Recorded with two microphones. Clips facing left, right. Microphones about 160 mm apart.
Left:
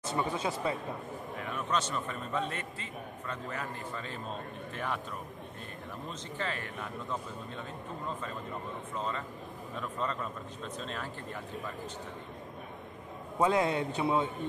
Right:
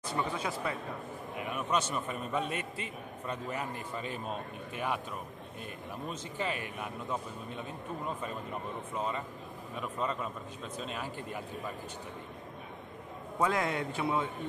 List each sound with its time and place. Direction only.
0.0 s a man's voice: 25° left (ahead or behind)
1.4 s a man's voice: 10° right (ahead or behind)
6.0 s a man's voice: 15° right (ahead or behind)
8.9 s a man's voice: 15° right (ahead or behind)
9.8 s a man's voice: 5° right (ahead or behind)
13.4 s a man's voice: 25° left (ahead or behind)